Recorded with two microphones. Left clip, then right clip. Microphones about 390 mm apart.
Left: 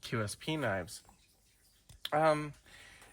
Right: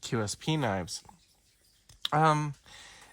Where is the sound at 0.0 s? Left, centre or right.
Centre.